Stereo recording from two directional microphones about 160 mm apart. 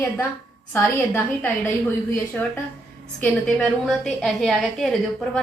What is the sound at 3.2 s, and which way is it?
A woman's voice, 5° left (ahead or behind).